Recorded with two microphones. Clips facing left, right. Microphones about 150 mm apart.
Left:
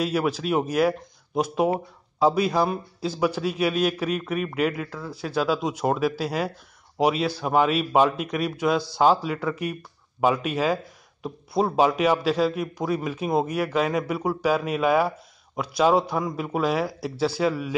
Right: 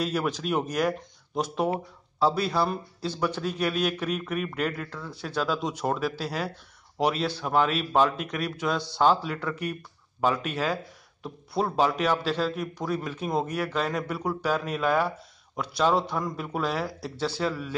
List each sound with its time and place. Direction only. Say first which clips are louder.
0.0 s a man's voice: left 4 dB; 10° left (ahead or behind)